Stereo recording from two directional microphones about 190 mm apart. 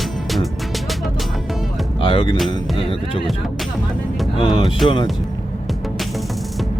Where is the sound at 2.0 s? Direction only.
25° left (ahead or behind).